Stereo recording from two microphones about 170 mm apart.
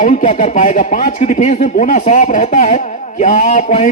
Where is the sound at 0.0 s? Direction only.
45° left (ahead or behind).